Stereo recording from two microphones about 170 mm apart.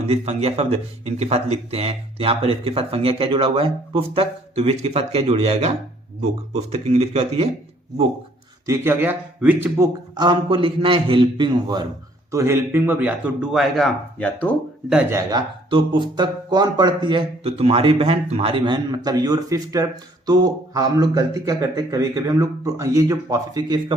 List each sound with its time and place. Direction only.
0.0 s speech: 40° right (ahead or behind)
8.6 s a man's voice: 15° right (ahead or behind); by 14.5 s 10° left (ahead or behind)
15.1 s speech: 25° right (ahead or behind)